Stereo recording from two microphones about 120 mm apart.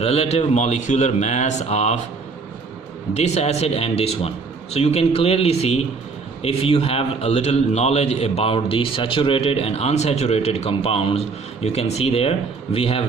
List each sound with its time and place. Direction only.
0.0 s a man's voice: 60° left (ahead or behind)
3.2 s a man's voice: 65° left (ahead or behind)